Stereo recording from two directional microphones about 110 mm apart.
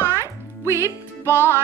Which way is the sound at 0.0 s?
25° right (ahead or behind).